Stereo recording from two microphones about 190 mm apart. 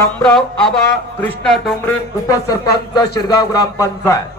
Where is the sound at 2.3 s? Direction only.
20° left (ahead or behind).